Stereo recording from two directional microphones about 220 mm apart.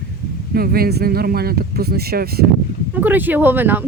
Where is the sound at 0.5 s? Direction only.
45° right (ahead or behind).